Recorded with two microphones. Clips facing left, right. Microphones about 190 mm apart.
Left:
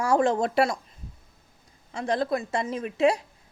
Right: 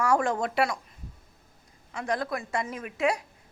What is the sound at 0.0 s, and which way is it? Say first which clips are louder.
Speech: left 3 dB; 25° left (ahead or behind).